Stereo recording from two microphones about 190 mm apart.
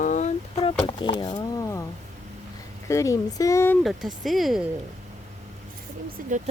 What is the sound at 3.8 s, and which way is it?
Speech, centre (ahead or behind).